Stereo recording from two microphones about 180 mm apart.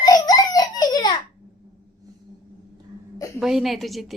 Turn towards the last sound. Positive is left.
turn(degrees=0)  # may be behind; listen again after turning